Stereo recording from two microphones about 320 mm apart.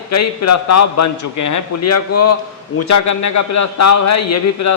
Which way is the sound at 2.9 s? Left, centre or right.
Left.